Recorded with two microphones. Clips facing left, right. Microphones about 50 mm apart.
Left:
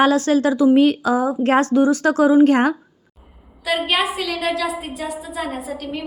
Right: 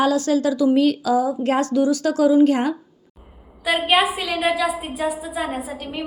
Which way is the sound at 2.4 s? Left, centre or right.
Left.